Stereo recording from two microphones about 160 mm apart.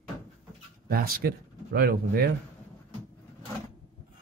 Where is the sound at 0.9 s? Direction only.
70° right (ahead or behind).